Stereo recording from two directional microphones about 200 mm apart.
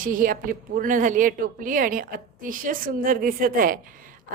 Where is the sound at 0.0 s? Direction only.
45° right (ahead or behind).